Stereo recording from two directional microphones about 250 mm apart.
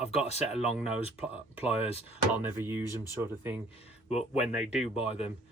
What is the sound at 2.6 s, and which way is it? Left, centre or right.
Speech, centre.